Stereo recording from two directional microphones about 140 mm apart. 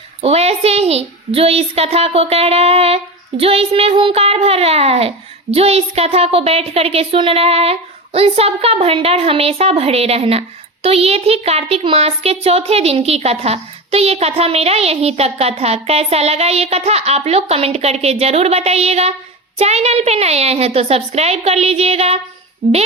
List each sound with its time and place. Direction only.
0.2 s a child's voice: 50° right (ahead or behind)